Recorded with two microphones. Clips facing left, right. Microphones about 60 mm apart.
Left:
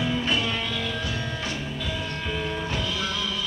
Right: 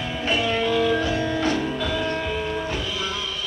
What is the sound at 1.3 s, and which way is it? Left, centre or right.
Music, right.